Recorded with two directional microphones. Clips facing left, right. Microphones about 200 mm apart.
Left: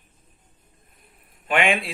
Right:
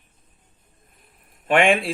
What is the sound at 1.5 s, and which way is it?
Speech, 50° right (ahead or behind).